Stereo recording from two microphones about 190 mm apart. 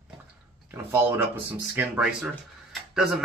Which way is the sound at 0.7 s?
10° right (ahead or behind).